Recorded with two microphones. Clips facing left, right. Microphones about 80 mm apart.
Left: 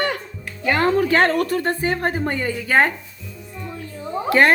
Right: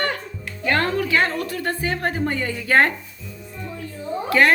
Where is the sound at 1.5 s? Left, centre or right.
Left.